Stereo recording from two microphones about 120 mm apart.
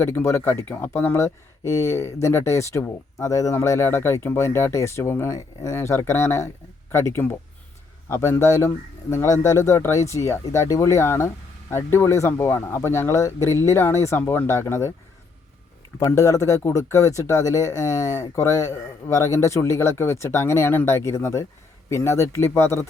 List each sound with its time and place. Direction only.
0.0 s speech: 20° left (ahead or behind)
16.0 s speech: 25° left (ahead or behind)